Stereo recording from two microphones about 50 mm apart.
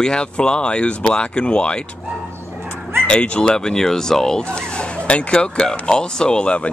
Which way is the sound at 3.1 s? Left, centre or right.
Centre.